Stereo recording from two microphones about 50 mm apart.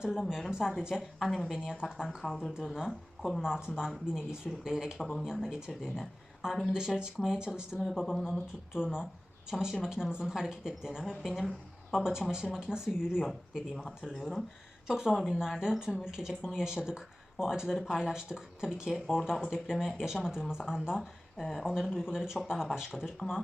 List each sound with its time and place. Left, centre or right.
0.0 s speech: centre
1.2 s speech: centre
2.5 s speech: centre
3.2 s speech: centre
3.4 s speech: centre
4.9 s speech: centre
5.2 s speech: centre
11.2 s speech: centre
12.5 s speech: centre
13.7 s speech: centre